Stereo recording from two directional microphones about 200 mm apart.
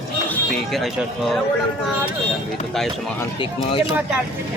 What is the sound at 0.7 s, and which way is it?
Speech, centre (ahead or behind).